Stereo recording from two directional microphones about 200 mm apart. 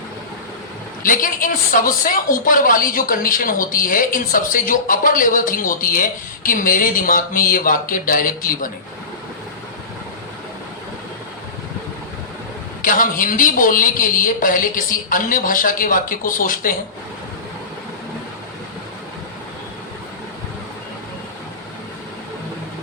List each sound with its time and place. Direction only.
1.0 s a woman's voice: 45° left (ahead or behind)
12.8 s a woman's voice: 40° left (ahead or behind)